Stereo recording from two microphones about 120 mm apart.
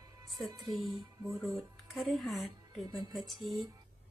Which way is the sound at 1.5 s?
Centre (ahead or behind).